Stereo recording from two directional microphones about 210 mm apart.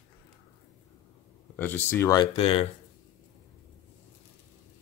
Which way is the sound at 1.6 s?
10° left (ahead or behind).